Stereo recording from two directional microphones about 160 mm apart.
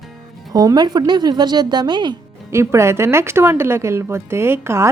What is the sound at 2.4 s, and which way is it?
Speech, 15° right (ahead or behind).